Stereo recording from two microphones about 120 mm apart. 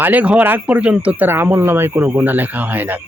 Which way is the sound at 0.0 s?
15° right (ahead or behind).